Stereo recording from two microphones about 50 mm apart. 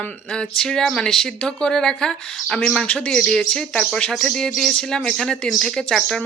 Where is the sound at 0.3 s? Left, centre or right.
Centre.